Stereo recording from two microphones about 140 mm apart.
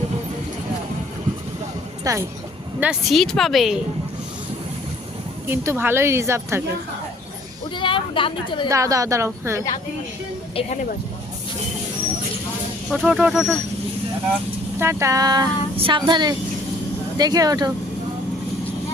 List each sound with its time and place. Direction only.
2.0 s speech: 25° right (ahead or behind)
2.8 s a woman's voice: 5° right (ahead or behind)
5.5 s speech: 15° right (ahead or behind)
7.8 s a woman's voice: 35° left (ahead or behind)
8.7 s speech: 25° right (ahead or behind)
10.5 s speech: 45° left (ahead or behind)
12.9 s a woman's voice: 5° right (ahead or behind)
14.8 s speech: 20° right (ahead or behind)